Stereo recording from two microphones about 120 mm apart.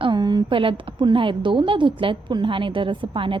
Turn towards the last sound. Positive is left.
turn(degrees=-45)  # may be behind; listen again after turning